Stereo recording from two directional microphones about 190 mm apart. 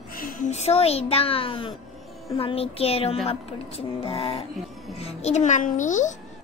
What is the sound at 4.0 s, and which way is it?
Music, 30° left (ahead or behind).